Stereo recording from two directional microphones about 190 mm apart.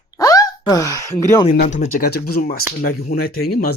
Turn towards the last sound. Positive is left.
turn(degrees=55)  # may be behind; listen again after turning